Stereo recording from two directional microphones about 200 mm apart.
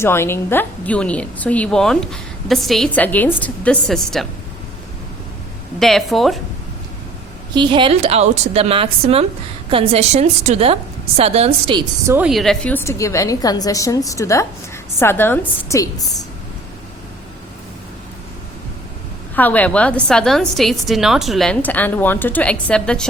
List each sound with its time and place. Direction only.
0.0 s a woman's voice: 10° left (ahead or behind)
5.8 s a woman's voice: centre (ahead or behind)
7.5 s a woman's voice: 25° right (ahead or behind)
12.1 s a woman's voice: 5° right (ahead or behind); by 16.0 s 15° left (ahead or behind)
19.4 s a woman's voice: 10° left (ahead or behind)